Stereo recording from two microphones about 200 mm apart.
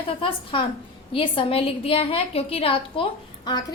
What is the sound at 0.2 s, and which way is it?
A woman's voice, 25° left (ahead or behind).